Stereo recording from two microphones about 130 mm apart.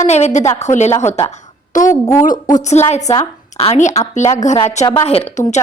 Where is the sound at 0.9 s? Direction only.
20° left (ahead or behind).